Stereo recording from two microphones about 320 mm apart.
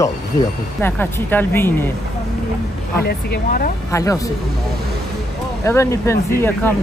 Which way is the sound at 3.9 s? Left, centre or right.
Centre.